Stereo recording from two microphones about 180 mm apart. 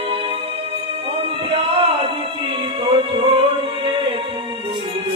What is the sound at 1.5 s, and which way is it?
Music, 30° right (ahead or behind).